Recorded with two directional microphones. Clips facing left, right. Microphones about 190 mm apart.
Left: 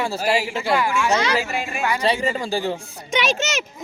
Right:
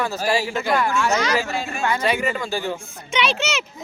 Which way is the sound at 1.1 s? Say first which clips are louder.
Left 1 dB; 30° left (ahead or behind).